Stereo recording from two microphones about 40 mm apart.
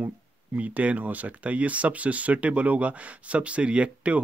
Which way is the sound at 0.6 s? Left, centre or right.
Right.